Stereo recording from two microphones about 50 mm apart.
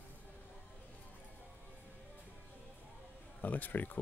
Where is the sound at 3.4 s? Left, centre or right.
Left.